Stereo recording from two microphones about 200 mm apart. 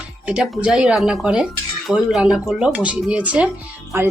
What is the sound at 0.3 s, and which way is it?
Speech, 5° right (ahead or behind).